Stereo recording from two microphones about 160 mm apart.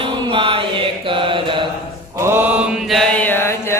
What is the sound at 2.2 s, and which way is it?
Mantra, 10° right (ahead or behind).